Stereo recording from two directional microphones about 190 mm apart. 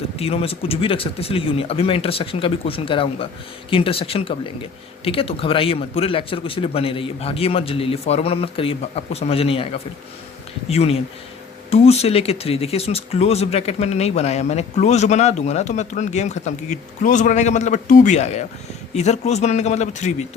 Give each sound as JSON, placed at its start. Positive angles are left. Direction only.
{"t": 0.2, "sound": "a man's voice", "side_deg": 30}